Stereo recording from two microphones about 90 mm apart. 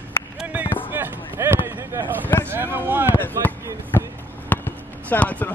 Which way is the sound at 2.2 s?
20° left (ahead or behind).